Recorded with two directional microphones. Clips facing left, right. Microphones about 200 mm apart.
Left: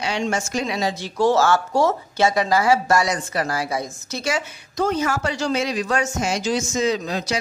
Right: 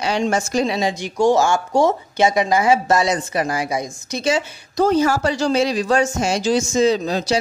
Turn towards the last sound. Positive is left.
turn(degrees=-30)  # may be behind; listen again after turning